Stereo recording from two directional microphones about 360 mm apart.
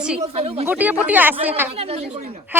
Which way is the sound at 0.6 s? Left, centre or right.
Centre.